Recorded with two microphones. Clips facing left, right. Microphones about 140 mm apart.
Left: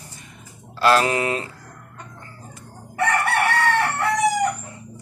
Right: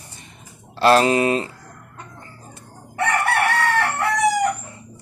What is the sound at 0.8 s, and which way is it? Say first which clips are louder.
Speech: right 3 dB; 25° right (ahead or behind).